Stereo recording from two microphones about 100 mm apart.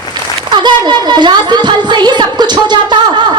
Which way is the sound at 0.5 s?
50° right (ahead or behind).